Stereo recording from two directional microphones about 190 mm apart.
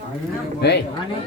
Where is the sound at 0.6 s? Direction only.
60° left (ahead or behind).